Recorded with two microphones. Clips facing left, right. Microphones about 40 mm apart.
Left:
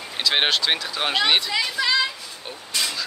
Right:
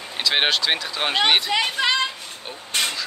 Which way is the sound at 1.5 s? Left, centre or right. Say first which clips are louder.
Right 2 dB; right.